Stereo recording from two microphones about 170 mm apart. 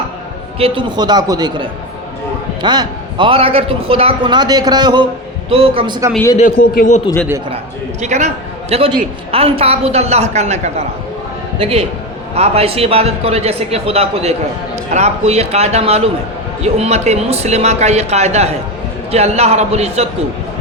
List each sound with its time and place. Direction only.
0.6 s a man's voice: 30° right (ahead or behind)
6.3 s a man's voice: 50° left (ahead or behind)
8.0 s a man's voice: 40° right (ahead or behind)